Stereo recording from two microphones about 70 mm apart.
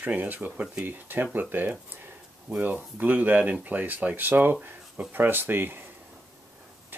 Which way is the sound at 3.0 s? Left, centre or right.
Right.